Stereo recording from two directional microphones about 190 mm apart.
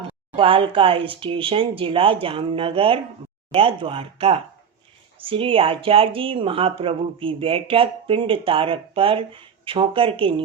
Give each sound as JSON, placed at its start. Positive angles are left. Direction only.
{"t": 0.3, "sound": "speech", "side_deg": -30}